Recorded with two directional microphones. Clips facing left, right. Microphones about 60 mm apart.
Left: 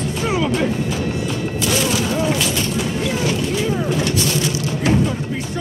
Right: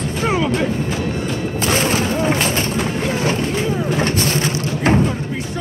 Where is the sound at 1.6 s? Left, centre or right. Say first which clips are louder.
Right 2 dB; right.